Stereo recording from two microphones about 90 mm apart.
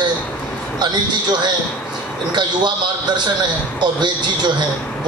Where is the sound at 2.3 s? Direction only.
55° right (ahead or behind).